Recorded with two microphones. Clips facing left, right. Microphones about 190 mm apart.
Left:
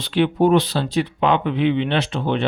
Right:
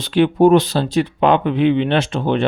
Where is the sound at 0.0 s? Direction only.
45° right (ahead or behind).